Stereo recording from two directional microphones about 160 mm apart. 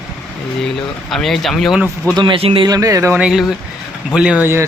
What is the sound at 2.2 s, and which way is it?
Speech, 35° right (ahead or behind).